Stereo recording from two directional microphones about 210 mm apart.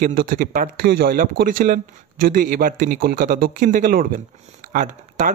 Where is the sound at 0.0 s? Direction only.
45° right (ahead or behind).